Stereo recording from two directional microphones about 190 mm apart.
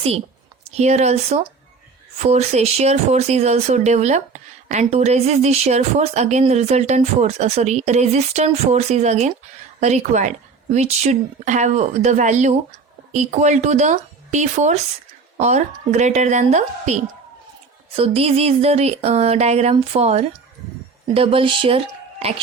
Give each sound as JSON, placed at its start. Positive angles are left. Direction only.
{"t": 0.7, "sound": "speech", "side_deg": -35}